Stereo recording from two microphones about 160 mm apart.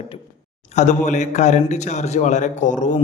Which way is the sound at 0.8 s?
50° left (ahead or behind).